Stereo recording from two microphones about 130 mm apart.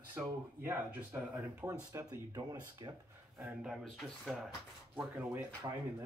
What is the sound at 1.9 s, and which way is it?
Speech, 30° right (ahead or behind).